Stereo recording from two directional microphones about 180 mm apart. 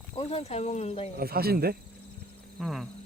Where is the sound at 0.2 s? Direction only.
35° left (ahead or behind).